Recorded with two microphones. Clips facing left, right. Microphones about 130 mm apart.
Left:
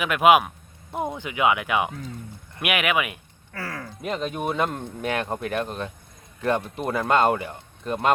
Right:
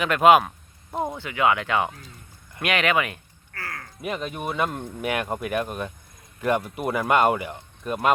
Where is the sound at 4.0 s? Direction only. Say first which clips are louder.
Left 2 dB; 5° right (ahead or behind).